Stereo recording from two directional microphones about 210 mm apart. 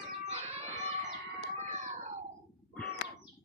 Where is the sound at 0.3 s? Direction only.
30° right (ahead or behind).